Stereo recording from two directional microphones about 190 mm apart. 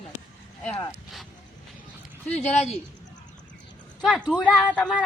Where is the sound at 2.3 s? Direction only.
35° left (ahead or behind).